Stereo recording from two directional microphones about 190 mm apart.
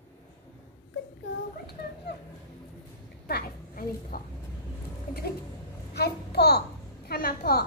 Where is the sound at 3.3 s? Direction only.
50° left (ahead or behind).